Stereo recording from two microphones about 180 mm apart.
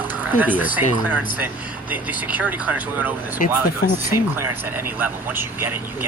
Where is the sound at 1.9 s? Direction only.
10° right (ahead or behind).